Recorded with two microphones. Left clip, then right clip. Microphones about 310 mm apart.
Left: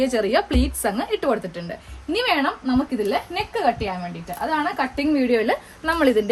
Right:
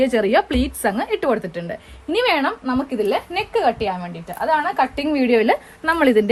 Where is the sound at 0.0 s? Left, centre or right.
Right.